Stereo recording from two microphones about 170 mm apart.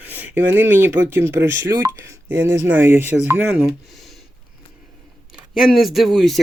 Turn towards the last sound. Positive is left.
turn(degrees=0)  # may be behind; listen again after turning